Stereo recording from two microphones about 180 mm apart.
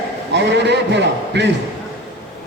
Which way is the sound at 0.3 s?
75° right (ahead or behind).